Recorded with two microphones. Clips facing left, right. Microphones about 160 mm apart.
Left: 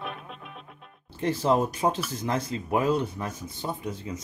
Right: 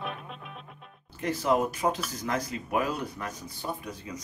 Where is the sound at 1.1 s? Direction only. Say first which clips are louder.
Left 2 dB; 30° left (ahead or behind).